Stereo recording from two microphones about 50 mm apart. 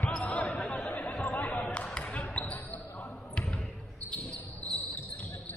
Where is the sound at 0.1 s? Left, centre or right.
Left.